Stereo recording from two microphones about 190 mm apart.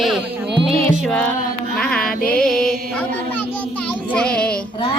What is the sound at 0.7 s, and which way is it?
Music, 30° right (ahead or behind).